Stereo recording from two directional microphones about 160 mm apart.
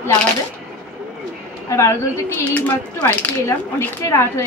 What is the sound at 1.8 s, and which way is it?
Speech, 15° left (ahead or behind).